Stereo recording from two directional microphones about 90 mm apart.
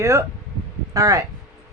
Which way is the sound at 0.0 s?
35° right (ahead or behind).